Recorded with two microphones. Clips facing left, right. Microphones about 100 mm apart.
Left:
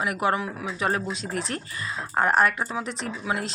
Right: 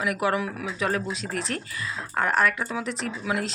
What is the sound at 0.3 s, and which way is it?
Speech, 25° left (ahead or behind).